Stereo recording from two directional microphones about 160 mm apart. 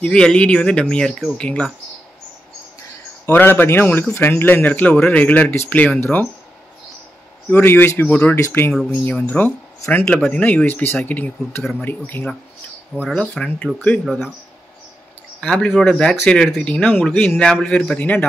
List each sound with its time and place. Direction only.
0.0 s speech: 5° left (ahead or behind)
3.3 s speech: 15° left (ahead or behind)
7.4 s speech: 10° left (ahead or behind)
15.4 s speech: 5° left (ahead or behind)